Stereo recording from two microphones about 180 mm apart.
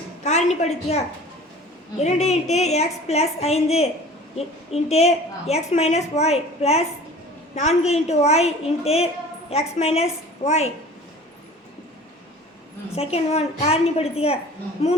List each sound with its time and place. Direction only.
0.3 s a woman's voice: 40° left (ahead or behind)
13.0 s a woman's voice: 35° left (ahead or behind)